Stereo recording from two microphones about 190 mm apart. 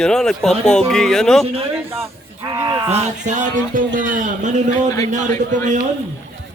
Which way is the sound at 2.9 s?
40° right (ahead or behind).